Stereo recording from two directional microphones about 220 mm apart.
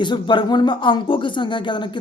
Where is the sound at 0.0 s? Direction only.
20° left (ahead or behind).